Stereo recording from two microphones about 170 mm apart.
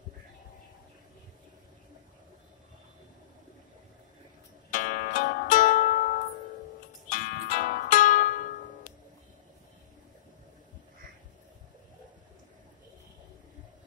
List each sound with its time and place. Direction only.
4.6 s zither: 50° left (ahead or behind)
7.1 s zither: 50° left (ahead or behind)